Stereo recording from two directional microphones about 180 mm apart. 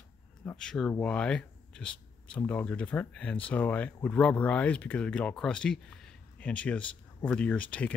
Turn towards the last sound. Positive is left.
turn(degrees=5)  # may be behind; listen again after turning